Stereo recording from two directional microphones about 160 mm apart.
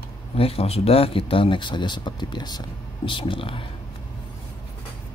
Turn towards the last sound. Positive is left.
turn(degrees=35)  # may be behind; listen again after turning